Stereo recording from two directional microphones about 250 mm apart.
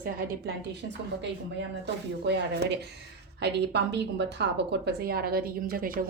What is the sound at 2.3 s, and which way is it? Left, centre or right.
Speech, right.